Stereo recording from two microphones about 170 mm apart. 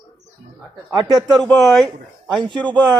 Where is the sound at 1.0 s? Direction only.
20° right (ahead or behind).